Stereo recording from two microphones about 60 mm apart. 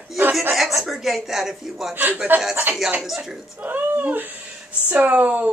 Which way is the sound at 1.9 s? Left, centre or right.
Right.